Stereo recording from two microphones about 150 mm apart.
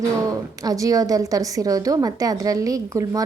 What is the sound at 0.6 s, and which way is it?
A woman's voice, 25° right (ahead or behind).